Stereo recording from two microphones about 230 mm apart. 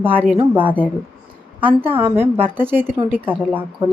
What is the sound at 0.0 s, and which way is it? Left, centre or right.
A woman's voice, centre.